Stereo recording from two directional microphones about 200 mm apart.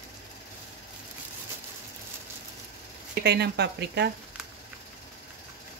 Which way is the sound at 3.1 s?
55° right (ahead or behind).